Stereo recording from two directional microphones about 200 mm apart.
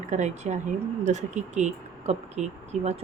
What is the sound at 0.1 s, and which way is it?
Speech, 35° right (ahead or behind).